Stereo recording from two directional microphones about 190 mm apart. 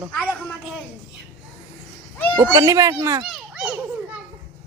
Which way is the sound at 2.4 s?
15° right (ahead or behind).